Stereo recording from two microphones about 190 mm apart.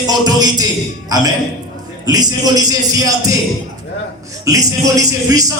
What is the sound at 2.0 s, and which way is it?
Speech, 20° right (ahead or behind).